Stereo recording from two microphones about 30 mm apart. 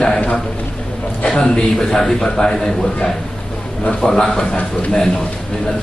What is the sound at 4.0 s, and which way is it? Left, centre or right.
Speech, left.